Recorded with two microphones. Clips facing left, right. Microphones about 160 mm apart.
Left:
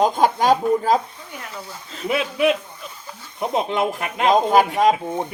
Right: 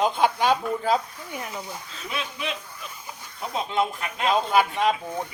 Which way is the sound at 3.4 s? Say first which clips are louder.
Left 5 dB; 55° left (ahead or behind).